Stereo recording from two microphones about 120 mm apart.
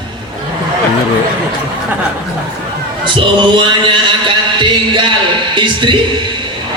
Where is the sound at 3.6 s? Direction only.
45° right (ahead or behind).